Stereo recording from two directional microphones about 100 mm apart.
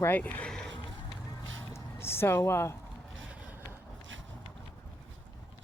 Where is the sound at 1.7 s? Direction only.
25° left (ahead or behind).